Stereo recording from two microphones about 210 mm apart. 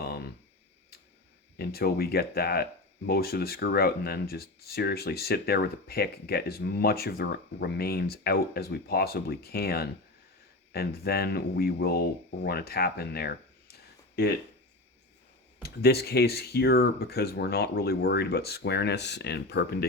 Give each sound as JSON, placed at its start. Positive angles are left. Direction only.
{"t": 0.0, "sound": "a sound", "side_deg": 50}
{"t": 1.5, "sound": "speech", "side_deg": 50}
{"t": 15.6, "sound": "speech", "side_deg": 50}